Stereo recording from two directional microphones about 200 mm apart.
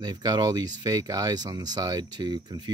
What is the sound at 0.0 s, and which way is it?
Speech, 20° right (ahead or behind).